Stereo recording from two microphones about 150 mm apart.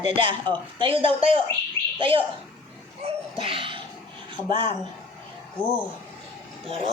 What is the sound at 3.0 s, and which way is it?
Laughter, 40° right (ahead or behind).